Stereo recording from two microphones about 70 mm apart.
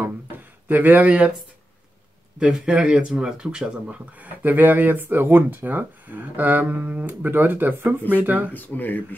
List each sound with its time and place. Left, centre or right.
0.7 s speech: right
2.3 s speech: centre
4.2 s speech: right
8.5 s speech: left